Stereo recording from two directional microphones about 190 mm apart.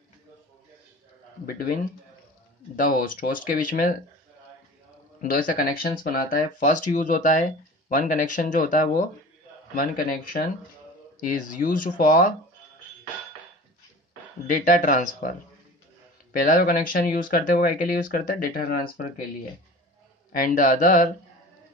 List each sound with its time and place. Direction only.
1.4 s speech: 50° left (ahead or behind)
5.2 s speech: 45° left (ahead or behind)
14.6 s speech: 40° left (ahead or behind)
16.3 s speech: 50° left (ahead or behind)
20.3 s speech: 45° left (ahead or behind)